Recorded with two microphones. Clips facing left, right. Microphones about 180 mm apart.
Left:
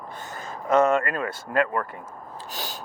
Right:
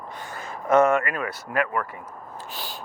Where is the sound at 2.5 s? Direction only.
40° left (ahead or behind).